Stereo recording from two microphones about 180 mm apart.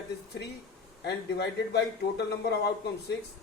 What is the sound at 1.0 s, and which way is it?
Speech, 65° left (ahead or behind).